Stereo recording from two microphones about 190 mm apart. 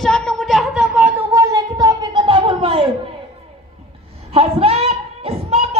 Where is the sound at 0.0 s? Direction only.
5° left (ahead or behind); by 2.8 s 30° right (ahead or behind).